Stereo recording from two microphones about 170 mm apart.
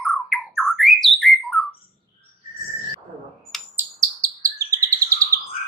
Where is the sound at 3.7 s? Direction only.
20° right (ahead or behind).